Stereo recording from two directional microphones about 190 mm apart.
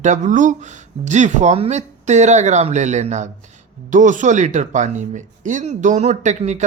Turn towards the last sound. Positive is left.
turn(degrees=-40)  # may be behind; listen again after turning